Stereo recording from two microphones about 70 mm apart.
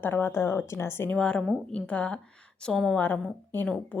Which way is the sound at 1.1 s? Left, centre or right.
Centre.